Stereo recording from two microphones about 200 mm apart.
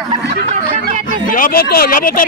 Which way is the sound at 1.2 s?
45° left (ahead or behind).